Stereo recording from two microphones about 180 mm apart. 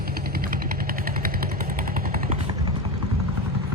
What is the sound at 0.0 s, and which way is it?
Vehicle, 55° right (ahead or behind).